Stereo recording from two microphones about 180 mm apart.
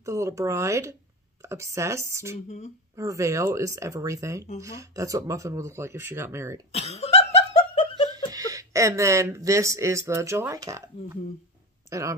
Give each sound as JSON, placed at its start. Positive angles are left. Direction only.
{"t": 0.0, "sound": "speech", "side_deg": -15}
{"t": 2.4, "sound": "speech", "side_deg": 40}
{"t": 3.0, "sound": "speech", "side_deg": -15}
{"t": 6.7, "sound": "laughter", "side_deg": 35}
{"t": 8.1, "sound": "speech", "side_deg": -20}